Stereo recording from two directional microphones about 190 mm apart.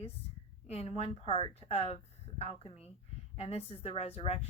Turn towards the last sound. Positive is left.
turn(degrees=35)  # may be behind; listen again after turning